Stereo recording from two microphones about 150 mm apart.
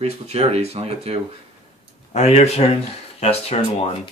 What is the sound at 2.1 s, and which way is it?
Speech, 45° left (ahead or behind).